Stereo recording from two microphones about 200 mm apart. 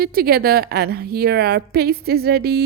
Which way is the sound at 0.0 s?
50° right (ahead or behind).